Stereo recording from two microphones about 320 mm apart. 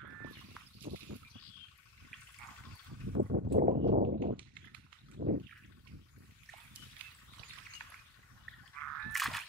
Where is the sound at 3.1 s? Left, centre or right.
Right.